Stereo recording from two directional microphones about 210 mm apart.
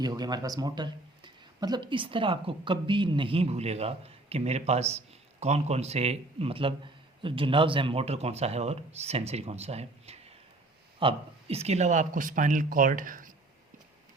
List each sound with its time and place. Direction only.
0.0 s speech: 20° right (ahead or behind); by 13.3 s 40° right (ahead or behind)